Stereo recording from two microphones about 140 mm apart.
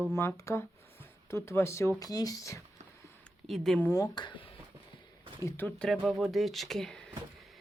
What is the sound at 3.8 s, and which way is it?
Speech, 25° left (ahead or behind).